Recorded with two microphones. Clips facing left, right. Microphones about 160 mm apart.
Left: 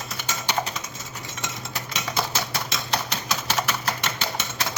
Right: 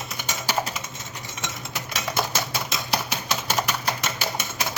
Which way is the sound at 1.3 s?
Centre (ahead or behind).